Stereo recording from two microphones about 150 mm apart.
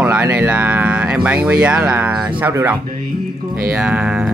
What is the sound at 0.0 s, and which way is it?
Speech, 10° right (ahead or behind).